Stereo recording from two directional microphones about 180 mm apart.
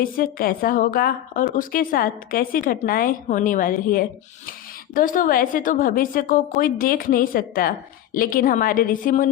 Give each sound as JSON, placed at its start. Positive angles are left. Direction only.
{"t": 0.0, "sound": "a woman's voice", "side_deg": 50}